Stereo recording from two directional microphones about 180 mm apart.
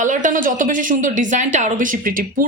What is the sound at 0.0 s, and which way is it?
Speech, 45° right (ahead or behind).